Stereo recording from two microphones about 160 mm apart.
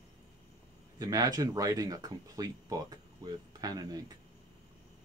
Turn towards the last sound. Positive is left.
turn(degrees=-25)  # may be behind; listen again after turning